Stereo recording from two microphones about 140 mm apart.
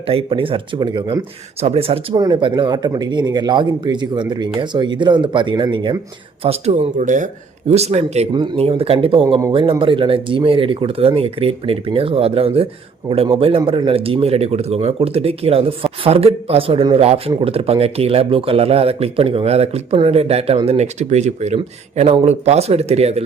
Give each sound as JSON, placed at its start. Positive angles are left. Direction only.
{"t": 0.1, "sound": "speech", "side_deg": -40}
{"t": 1.6, "sound": "speech", "side_deg": -45}
{"t": 2.1, "sound": "speech", "side_deg": -30}
{"t": 6.4, "sound": "speech", "side_deg": -45}
{"t": 7.7, "sound": "speech", "side_deg": -50}
{"t": 8.3, "sound": "speech", "side_deg": -40}